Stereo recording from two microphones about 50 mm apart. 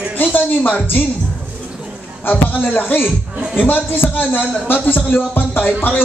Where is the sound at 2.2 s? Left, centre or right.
Left.